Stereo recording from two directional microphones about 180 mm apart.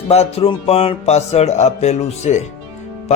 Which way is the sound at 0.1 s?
35° left (ahead or behind).